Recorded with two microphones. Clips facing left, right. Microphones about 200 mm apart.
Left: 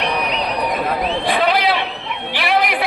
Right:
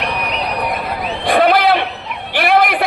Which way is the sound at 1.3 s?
50° right (ahead or behind).